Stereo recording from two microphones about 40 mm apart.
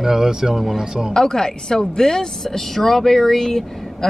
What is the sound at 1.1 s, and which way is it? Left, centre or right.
Speech, centre.